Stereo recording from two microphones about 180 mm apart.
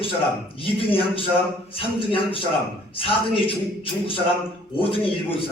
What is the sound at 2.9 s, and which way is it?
A man's voice, 30° left (ahead or behind).